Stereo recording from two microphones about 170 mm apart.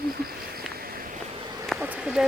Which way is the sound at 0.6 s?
60° right (ahead or behind).